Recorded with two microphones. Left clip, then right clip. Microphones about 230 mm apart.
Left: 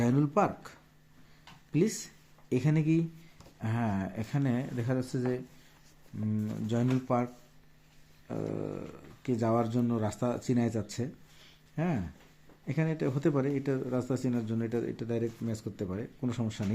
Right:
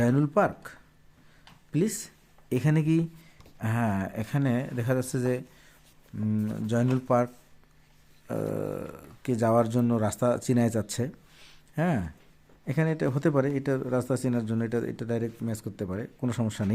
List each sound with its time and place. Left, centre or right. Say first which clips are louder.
0.0 s a man's voice: right 4 dB; right
8.3 s a man's voice: right 5 dB; right